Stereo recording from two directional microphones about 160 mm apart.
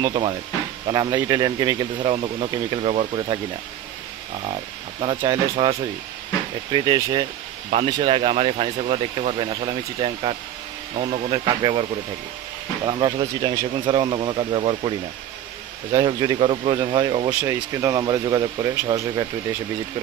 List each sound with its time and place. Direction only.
0.0 s speech: 30° right (ahead or behind)
5.0 s speech: 30° right (ahead or behind)
6.7 s speech: 25° right (ahead or behind)
12.8 s speech: 25° right (ahead or behind)